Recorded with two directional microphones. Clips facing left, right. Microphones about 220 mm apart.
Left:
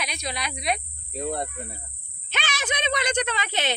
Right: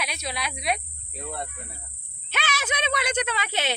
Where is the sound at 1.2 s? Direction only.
35° left (ahead or behind).